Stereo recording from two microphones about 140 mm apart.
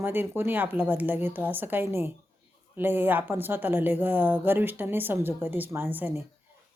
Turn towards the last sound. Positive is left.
turn(degrees=-15)  # may be behind; listen again after turning